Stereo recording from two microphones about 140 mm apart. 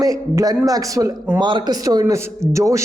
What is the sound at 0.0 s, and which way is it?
A man's voice, 25° right (ahead or behind).